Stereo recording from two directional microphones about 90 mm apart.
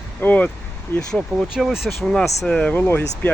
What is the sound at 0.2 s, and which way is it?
Speech, 15° left (ahead or behind).